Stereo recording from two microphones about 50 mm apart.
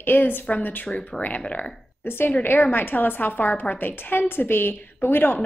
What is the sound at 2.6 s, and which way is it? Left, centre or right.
A woman's voice, left.